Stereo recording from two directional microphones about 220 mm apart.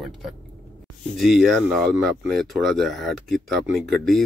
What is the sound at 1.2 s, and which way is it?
Speech, centre (ahead or behind).